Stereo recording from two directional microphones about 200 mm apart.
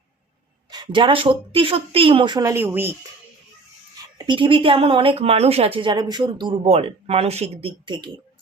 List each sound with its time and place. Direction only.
0.7 s speech: 20° right (ahead or behind)
4.3 s speech: 25° right (ahead or behind)